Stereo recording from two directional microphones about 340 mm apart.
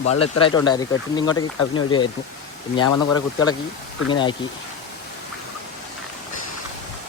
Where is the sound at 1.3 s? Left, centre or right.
Left.